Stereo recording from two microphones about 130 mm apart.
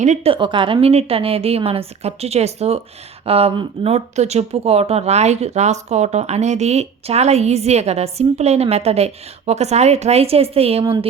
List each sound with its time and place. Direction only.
0.0 s speech: 65° right (ahead or behind)
0.3 s a woman's voice: 40° right (ahead or behind)
3.9 s speech: 60° right (ahead or behind)